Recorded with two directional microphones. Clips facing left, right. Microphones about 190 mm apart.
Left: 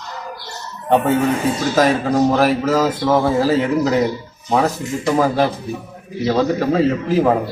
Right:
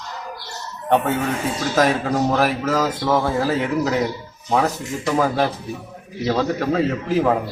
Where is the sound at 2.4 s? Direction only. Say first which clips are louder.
Left 4 dB; centre (ahead or behind).